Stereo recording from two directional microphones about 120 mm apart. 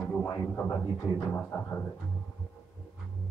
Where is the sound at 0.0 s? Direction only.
15° left (ahead or behind).